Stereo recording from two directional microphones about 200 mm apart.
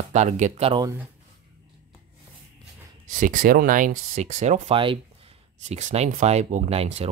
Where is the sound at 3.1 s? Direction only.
40° right (ahead or behind).